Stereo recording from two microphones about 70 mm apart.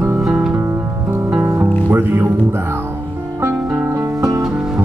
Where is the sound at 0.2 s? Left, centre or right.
Centre.